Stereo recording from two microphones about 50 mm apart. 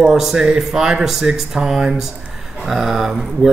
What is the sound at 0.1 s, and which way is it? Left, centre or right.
Speech, centre.